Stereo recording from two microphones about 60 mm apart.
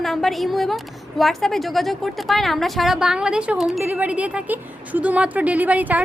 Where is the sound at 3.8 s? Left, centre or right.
Right.